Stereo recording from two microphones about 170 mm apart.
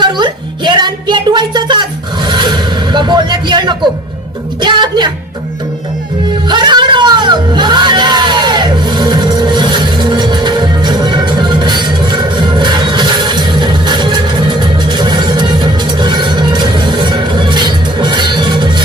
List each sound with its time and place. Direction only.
0.0 s music: 25° right (ahead or behind)
6.5 s music: 25° right (ahead or behind)